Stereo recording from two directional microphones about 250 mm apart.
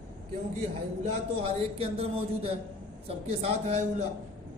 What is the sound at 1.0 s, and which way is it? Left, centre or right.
Speech, right.